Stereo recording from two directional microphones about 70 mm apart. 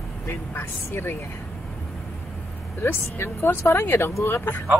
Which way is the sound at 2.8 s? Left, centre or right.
Left.